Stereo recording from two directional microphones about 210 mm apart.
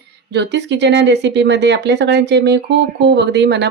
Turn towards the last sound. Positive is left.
turn(degrees=-55)  # may be behind; listen again after turning